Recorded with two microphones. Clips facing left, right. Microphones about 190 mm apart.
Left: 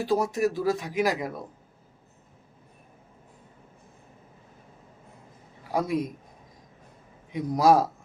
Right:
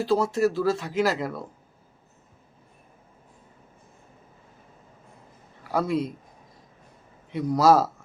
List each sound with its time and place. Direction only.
0.0 s speech: 15° left (ahead or behind)
5.7 s speech: 15° left (ahead or behind)
7.3 s speech: 15° left (ahead or behind)